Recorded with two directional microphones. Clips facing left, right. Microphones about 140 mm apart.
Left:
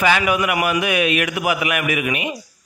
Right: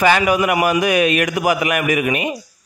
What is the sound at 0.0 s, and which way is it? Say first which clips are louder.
A man's voice: right 3 dB; 40° right (ahead or behind).